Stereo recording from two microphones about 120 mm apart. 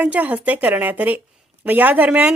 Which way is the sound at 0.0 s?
15° right (ahead or behind).